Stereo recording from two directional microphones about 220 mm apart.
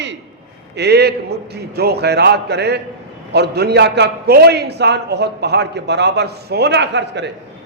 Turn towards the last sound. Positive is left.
turn(degrees=-50)  # may be behind; listen again after turning